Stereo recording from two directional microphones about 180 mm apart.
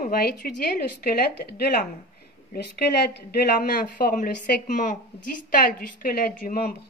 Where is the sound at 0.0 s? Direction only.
55° left (ahead or behind).